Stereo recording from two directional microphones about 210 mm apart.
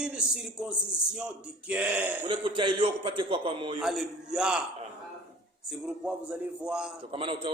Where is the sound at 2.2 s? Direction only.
20° right (ahead or behind).